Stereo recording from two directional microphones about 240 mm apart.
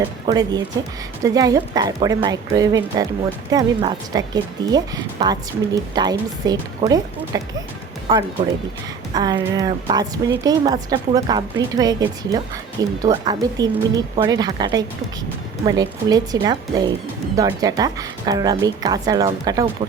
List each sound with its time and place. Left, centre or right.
0.3 s speech: centre
9.1 s speech: centre